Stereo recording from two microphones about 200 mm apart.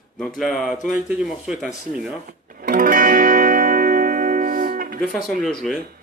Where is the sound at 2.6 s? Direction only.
45° right (ahead or behind).